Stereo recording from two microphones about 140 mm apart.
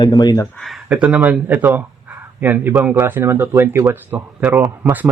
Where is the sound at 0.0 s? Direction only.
30° left (ahead or behind).